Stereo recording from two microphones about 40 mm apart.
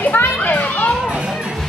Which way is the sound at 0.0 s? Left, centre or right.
Left.